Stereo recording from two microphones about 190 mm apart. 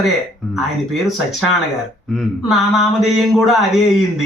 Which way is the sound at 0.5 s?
Centre (ahead or behind).